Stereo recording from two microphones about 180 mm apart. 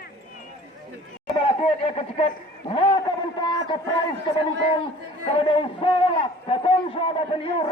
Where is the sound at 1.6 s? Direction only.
35° left (ahead or behind).